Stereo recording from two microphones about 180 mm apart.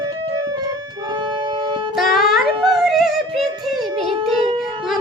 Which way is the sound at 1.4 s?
25° right (ahead or behind).